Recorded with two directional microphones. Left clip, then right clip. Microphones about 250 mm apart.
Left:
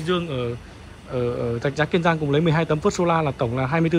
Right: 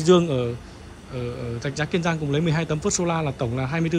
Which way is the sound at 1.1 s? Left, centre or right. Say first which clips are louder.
Left 7 dB; centre.